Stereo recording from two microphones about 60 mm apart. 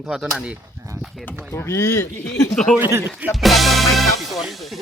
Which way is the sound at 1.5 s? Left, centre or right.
Left.